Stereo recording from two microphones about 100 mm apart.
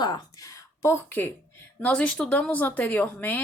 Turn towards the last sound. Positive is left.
turn(degrees=20)  # may be behind; listen again after turning